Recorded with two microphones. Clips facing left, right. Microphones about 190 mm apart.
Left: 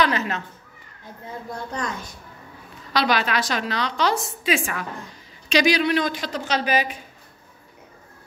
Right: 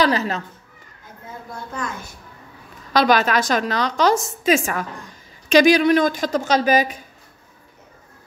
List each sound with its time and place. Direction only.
0.0 s speech: 35° right (ahead or behind)
2.9 s a woman's voice: 45° right (ahead or behind)